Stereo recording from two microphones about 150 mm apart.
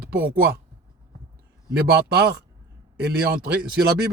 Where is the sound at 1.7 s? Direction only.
90° right.